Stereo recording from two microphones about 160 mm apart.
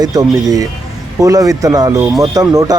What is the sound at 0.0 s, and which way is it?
A man's voice, 25° right (ahead or behind).